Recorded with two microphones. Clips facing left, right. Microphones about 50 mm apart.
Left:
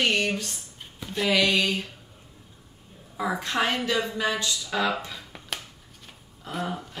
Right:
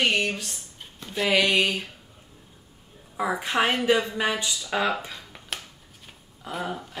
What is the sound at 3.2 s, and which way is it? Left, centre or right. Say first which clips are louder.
Speech: right 2 dB; centre.